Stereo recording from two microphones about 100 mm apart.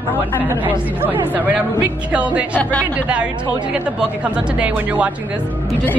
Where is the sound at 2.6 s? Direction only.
15° left (ahead or behind).